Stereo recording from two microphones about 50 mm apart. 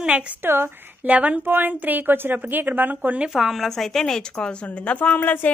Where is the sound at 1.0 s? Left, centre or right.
Right.